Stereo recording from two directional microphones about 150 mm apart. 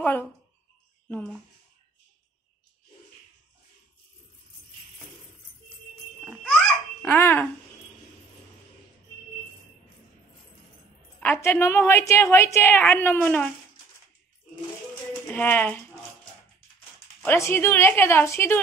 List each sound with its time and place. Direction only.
0.0 s a woman's voice: 15° left (ahead or behind)
6.5 s babbling: 10° left (ahead or behind)
11.1 s a woman's voice: 15° left (ahead or behind)
15.2 s a woman's voice: 10° left (ahead or behind)
17.2 s a woman's voice: 15° left (ahead or behind)